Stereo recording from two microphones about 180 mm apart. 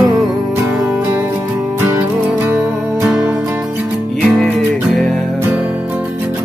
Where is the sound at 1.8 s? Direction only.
15° right (ahead or behind).